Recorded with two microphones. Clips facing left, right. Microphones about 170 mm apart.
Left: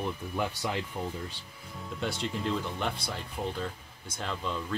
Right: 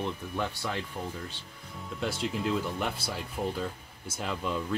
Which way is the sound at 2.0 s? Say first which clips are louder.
Right 2 dB; centre (ahead or behind).